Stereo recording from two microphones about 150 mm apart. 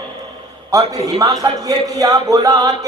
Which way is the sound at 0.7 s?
25° right (ahead or behind).